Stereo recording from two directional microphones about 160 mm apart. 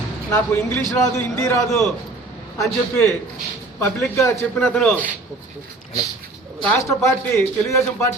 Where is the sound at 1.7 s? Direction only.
Centre (ahead or behind).